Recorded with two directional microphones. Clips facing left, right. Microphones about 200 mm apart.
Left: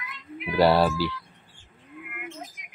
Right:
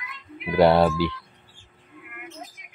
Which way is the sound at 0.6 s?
20° right (ahead or behind).